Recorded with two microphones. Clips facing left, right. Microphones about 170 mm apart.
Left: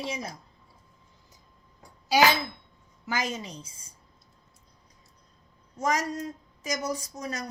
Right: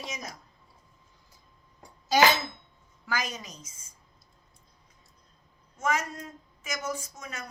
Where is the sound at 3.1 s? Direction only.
25° left (ahead or behind).